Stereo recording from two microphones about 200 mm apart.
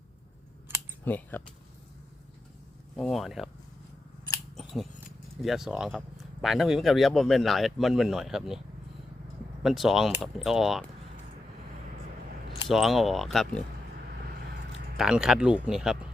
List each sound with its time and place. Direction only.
1.0 s speech: 10° left (ahead or behind)
2.9 s speech: centre (ahead or behind)
4.5 s scissors: centre (ahead or behind)
5.4 s speech: centre (ahead or behind)
9.6 s speech: centre (ahead or behind)
12.6 s speech: centre (ahead or behind)
14.9 s speech: centre (ahead or behind)